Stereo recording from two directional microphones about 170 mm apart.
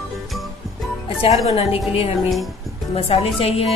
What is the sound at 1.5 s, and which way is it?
Speech, 35° left (ahead or behind).